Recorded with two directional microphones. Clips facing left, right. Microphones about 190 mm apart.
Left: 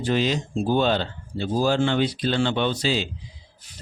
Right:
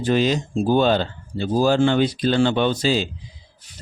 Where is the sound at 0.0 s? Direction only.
45° right (ahead or behind).